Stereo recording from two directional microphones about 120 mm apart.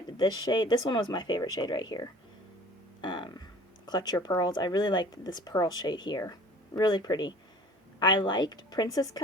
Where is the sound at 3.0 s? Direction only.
40° left (ahead or behind).